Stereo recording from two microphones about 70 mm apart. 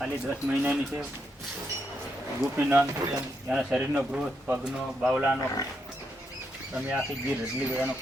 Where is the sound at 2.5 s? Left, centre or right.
Right.